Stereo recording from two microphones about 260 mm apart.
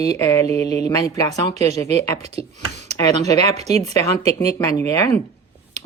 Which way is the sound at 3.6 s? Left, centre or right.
Right.